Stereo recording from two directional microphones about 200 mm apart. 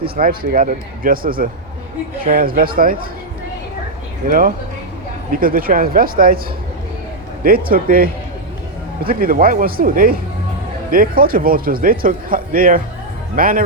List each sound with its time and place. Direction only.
0.2 s a man's voice: 45° right (ahead or behind)
4.3 s a man's voice: 45° right (ahead or behind)
7.4 s a man's voice: 45° right (ahead or behind)